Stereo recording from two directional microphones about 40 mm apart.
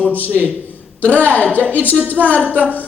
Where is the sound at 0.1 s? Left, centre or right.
Left.